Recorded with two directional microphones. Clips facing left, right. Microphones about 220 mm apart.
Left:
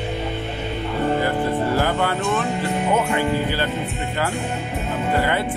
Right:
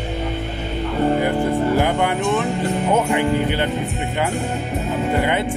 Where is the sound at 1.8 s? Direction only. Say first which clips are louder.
Right 2 dB; 15° right (ahead or behind).